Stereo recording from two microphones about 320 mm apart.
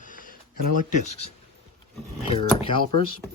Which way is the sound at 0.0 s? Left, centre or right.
Left.